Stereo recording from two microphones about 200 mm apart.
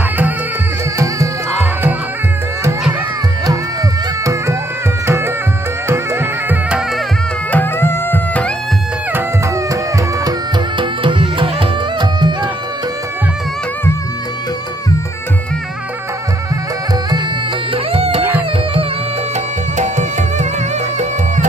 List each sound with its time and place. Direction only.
0.9 s music: 15° right (ahead or behind)
5.0 s music: 10° right (ahead or behind)
7.5 s music: 10° left (ahead or behind)
10.8 s music: 25° right (ahead or behind)
17.9 s music: 30° right (ahead or behind)
19.8 s music: 35° right (ahead or behind)